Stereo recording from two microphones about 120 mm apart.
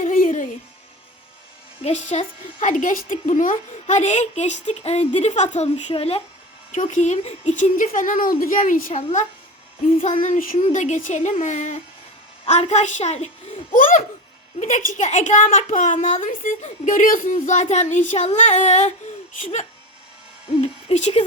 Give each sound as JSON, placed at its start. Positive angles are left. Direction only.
{"t": 0.0, "sound": "music", "side_deg": 90}
{"t": 1.8, "sound": "a woman's voice", "side_deg": 70}
{"t": 6.8, "sound": "speech", "side_deg": 75}
{"t": 10.1, "sound": "speech", "side_deg": 90}
{"t": 12.5, "sound": "a woman's voice", "side_deg": 70}
{"t": 14.6, "sound": "speech", "side_deg": 90}
{"t": 20.5, "sound": "a sound", "side_deg": 55}